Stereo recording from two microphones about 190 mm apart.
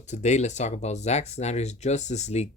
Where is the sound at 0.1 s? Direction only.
35° left (ahead or behind).